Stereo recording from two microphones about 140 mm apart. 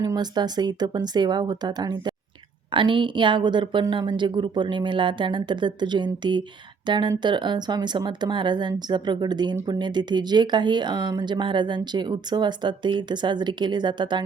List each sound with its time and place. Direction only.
0.0 s speech: 30° right (ahead or behind)